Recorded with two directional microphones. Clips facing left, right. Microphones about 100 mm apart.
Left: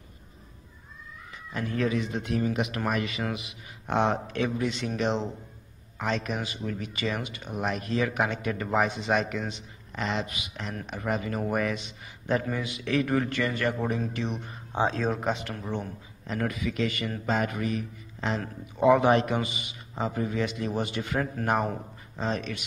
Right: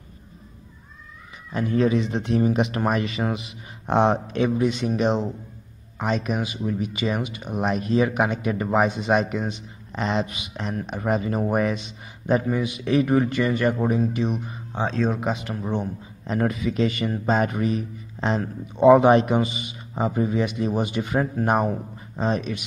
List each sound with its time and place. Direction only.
1.5 s speech: 20° right (ahead or behind)
14.7 s speech: 10° left (ahead or behind)
15.6 s a man's voice: 20° right (ahead or behind)